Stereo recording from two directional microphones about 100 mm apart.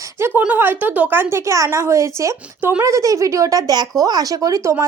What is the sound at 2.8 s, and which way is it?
Speech, 35° right (ahead or behind).